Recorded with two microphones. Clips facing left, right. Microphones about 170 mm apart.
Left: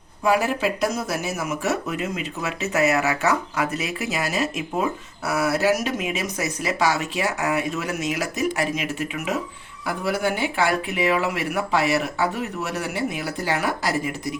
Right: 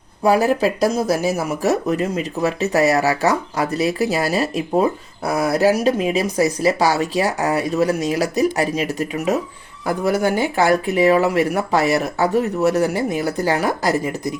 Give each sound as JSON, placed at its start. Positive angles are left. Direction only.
{"t": 0.2, "sound": "speech", "side_deg": -35}